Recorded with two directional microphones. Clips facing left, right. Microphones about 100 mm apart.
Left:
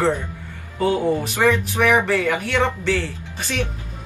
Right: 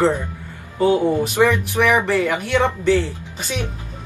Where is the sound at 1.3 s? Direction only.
15° right (ahead or behind).